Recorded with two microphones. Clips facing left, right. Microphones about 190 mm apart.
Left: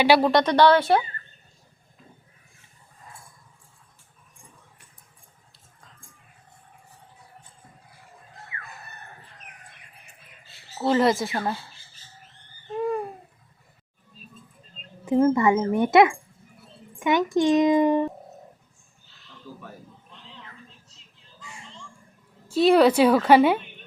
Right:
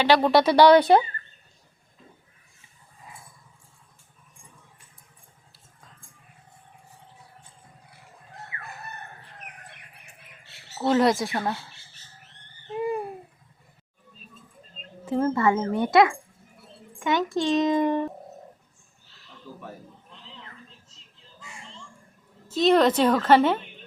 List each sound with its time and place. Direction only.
0.2 s speech: 5° right (ahead or behind)
10.8 s speech: centre (ahead or behind)
12.7 s babbling: 5° right (ahead or behind)
15.0 s a woman's voice: 15° left (ahead or behind)
22.4 s a woman's voice: 10° left (ahead or behind)